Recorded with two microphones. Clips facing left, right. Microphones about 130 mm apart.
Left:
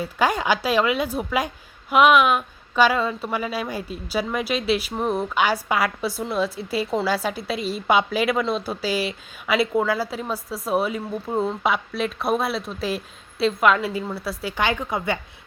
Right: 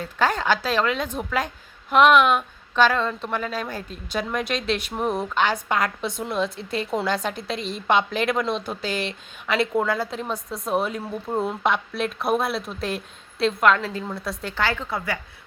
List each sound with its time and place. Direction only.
0.0 s a woman's voice: 10° left (ahead or behind)
14.6 s a woman's voice: 20° left (ahead or behind)